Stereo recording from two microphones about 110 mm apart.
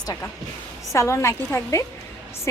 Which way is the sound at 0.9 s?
25° left (ahead or behind).